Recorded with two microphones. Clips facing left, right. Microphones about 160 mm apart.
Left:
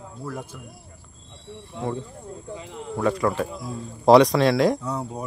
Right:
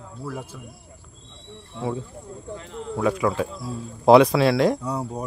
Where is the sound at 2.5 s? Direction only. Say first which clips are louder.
Right 1 dB; 10° left (ahead or behind).